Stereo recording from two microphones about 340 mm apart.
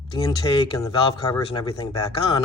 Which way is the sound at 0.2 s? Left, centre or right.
Centre.